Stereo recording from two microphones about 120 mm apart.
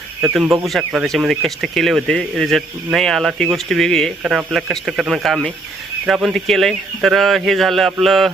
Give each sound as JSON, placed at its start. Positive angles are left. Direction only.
{"t": 0.2, "sound": "speech", "side_deg": -5}